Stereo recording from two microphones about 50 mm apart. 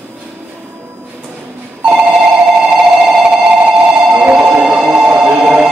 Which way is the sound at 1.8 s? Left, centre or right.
Right.